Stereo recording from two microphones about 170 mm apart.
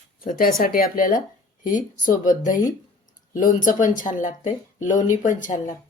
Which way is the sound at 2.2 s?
50° left (ahead or behind).